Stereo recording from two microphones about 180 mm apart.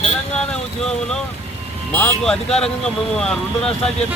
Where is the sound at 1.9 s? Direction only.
5° left (ahead or behind).